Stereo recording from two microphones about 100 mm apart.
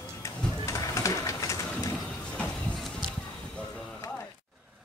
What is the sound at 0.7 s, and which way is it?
Printer, 30° left (ahead or behind).